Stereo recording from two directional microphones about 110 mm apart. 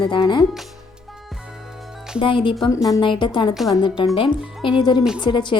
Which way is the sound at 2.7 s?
35° left (ahead or behind).